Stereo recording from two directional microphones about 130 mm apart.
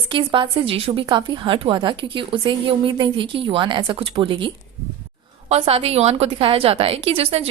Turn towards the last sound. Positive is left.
turn(degrees=-50)  # may be behind; listen again after turning